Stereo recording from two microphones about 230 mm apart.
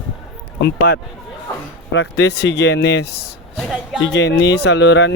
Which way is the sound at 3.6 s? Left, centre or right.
Centre.